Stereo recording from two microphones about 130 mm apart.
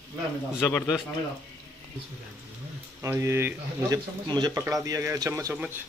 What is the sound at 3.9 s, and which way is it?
Speech, 35° right (ahead or behind).